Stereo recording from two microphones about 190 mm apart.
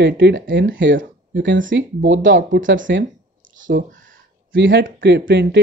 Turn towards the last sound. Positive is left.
turn(degrees=-65)  # may be behind; listen again after turning